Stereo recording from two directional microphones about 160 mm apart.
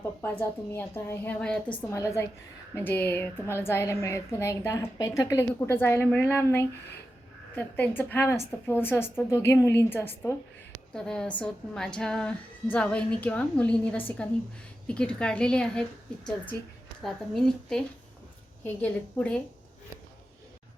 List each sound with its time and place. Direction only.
0.0 s a woman's voice: 10° left (ahead or behind)
1.9 s a woman's voice: 15° left (ahead or behind)
17.0 s a woman's voice: centre (ahead or behind)